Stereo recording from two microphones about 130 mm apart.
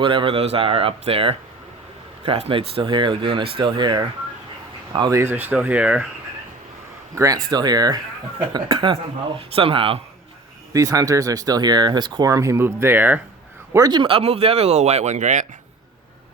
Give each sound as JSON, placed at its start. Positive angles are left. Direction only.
{"t": 0.0, "sound": "speech", "side_deg": -40}
{"t": 5.1, "sound": "speech", "side_deg": -15}
{"t": 7.5, "sound": "speech", "side_deg": -30}
{"t": 10.7, "sound": "speech", "side_deg": -25}
{"t": 13.7, "sound": "speech", "side_deg": -30}